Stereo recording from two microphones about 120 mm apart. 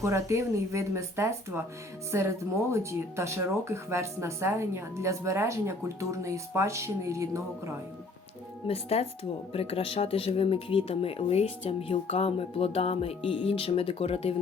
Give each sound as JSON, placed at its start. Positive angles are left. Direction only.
{"t": 0.0, "sound": "speech", "side_deg": -25}
{"t": 8.6, "sound": "speech", "side_deg": 55}